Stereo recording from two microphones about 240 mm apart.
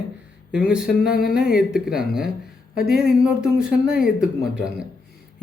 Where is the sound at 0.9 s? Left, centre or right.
Left.